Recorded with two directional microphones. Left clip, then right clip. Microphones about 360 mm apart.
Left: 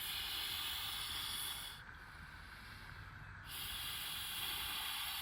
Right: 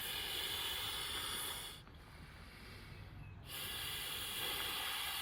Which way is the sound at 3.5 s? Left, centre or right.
Centre.